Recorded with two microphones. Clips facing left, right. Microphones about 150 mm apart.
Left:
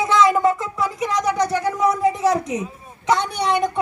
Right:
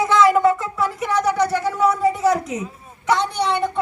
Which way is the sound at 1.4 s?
15° left (ahead or behind).